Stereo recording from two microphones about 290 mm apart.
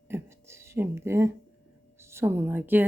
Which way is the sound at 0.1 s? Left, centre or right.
Centre.